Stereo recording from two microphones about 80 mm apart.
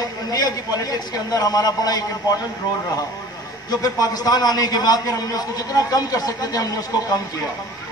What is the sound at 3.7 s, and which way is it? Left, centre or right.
A man's voice, left.